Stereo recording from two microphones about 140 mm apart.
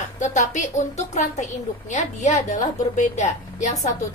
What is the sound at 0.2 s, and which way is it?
A woman's voice, 60° left (ahead or behind).